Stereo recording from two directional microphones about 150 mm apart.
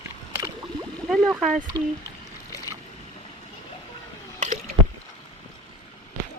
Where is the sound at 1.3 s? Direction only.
5° right (ahead or behind).